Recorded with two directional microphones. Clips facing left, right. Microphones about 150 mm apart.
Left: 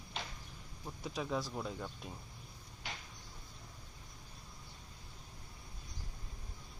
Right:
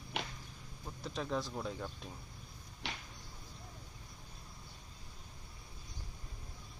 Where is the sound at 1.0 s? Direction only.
5° left (ahead or behind).